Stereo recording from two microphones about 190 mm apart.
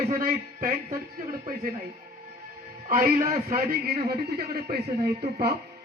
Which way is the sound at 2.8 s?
45° right (ahead or behind).